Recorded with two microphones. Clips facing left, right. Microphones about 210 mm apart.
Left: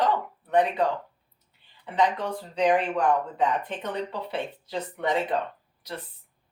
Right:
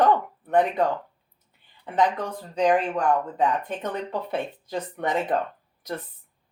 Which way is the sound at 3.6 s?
45° right (ahead or behind).